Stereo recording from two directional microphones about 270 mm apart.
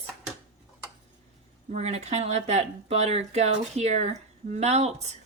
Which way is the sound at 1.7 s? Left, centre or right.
Right.